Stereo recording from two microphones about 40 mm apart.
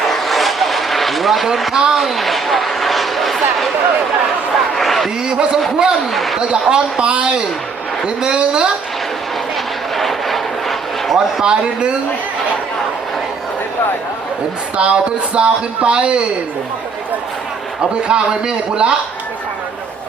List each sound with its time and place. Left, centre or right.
0.0 s vehicle: centre
1.7 s speech: centre
2.0 s a sound: centre
5.2 s speech: right
6.1 s speech: centre
6.5 s speech: centre
7.1 s speech: right
9.9 s vehicle: centre
11.4 s speech: right
14.8 s speech: right
18.1 s speech: right